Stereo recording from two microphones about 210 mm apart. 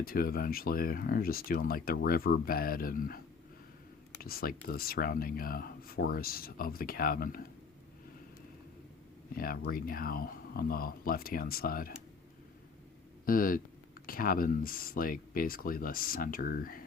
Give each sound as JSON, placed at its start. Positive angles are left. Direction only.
{"t": 0.0, "sound": "speech", "side_deg": 45}
{"t": 4.2, "sound": "speech", "side_deg": 45}
{"t": 9.3, "sound": "speech", "side_deg": 45}
{"t": 13.2, "sound": "speech", "side_deg": 40}